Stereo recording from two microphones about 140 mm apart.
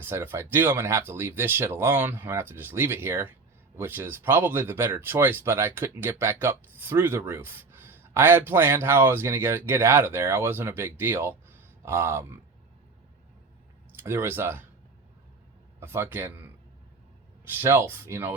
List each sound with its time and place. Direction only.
0.0 s speech: 15° right (ahead or behind)
13.9 s speech: 15° right (ahead or behind)
15.8 s speech: 15° right (ahead or behind)
17.4 s speech: 15° right (ahead or behind)